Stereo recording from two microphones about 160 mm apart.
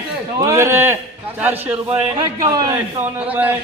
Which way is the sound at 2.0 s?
25° right (ahead or behind).